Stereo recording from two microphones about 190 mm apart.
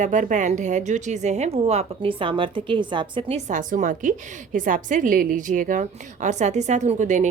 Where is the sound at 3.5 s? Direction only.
45° right (ahead or behind).